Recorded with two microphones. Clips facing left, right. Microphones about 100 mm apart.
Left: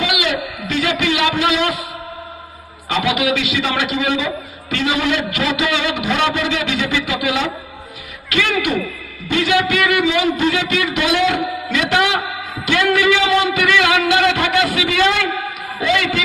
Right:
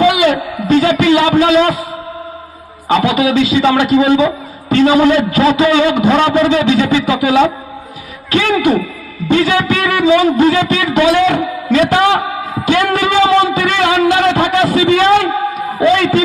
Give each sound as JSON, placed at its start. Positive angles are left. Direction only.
{"t": 0.0, "sound": "a man's voice", "side_deg": -35}
{"t": 2.9, "sound": "a man's voice", "side_deg": -30}